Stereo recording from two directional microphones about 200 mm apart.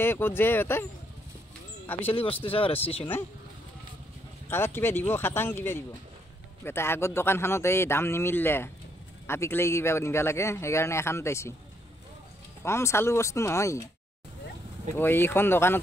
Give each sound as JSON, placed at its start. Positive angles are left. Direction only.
{"t": 0.0, "sound": "speech", "side_deg": 10}
{"t": 2.0, "sound": "speech", "side_deg": 30}
{"t": 4.5, "sound": "speech", "side_deg": 10}
{"t": 12.6, "sound": "speech", "side_deg": 15}
{"t": 14.9, "sound": "speech", "side_deg": 10}